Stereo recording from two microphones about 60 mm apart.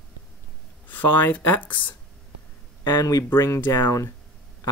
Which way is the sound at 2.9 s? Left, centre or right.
Left.